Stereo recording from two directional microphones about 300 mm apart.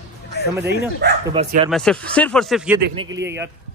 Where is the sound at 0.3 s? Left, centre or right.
Left.